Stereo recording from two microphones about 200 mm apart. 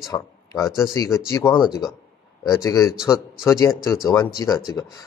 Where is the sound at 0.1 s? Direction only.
15° left (ahead or behind).